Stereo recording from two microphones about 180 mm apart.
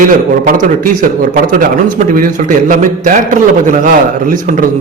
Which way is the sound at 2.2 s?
45° right (ahead or behind).